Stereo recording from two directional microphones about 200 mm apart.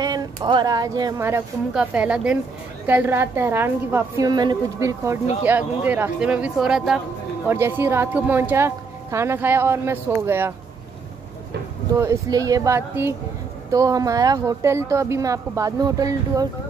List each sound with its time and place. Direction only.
0.0 s speech: 20° right (ahead or behind)
12.0 s speech: 15° right (ahead or behind)